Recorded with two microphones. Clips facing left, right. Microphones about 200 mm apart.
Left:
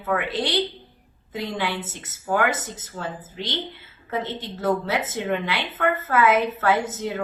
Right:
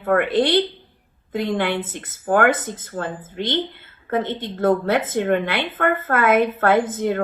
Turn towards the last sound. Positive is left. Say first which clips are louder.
# right 5 dB
turn(degrees=-55)  # may be behind; listen again after turning